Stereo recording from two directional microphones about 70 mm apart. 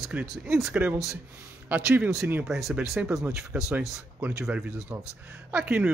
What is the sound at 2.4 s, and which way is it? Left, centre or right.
Speech, centre.